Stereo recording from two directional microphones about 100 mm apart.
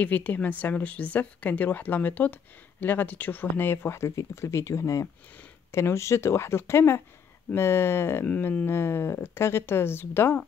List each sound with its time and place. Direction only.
0.0 s a woman's voice: 15° left (ahead or behind)